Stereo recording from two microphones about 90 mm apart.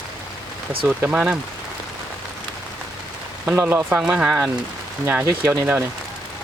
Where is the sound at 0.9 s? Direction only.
15° right (ahead or behind).